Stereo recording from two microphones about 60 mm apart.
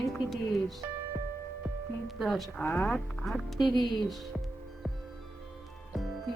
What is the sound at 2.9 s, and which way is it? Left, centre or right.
Speech, centre.